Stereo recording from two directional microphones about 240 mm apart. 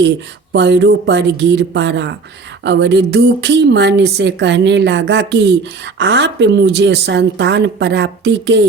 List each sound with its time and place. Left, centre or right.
0.5 s speech: right